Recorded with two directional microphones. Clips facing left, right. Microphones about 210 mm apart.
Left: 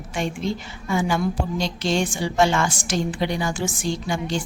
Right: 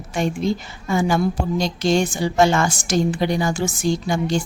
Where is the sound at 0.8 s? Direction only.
40° right (ahead or behind).